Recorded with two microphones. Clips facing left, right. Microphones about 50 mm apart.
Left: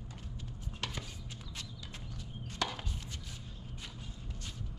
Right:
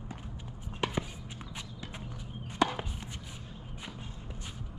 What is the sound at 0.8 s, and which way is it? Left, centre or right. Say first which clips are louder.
Walk: right 8 dB; right.